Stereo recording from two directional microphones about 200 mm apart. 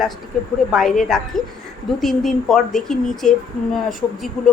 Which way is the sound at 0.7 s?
Centre (ahead or behind).